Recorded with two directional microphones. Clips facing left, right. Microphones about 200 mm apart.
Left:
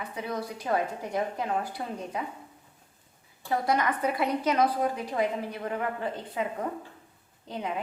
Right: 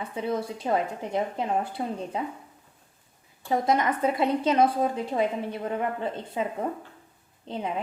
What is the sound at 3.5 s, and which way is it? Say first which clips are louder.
A woman's voice: right 3 dB; 20° right (ahead or behind).